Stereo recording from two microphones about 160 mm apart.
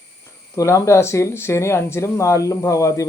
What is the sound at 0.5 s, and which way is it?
Speech, 20° left (ahead or behind).